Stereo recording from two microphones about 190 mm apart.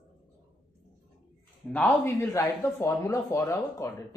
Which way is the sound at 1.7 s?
10° left (ahead or behind).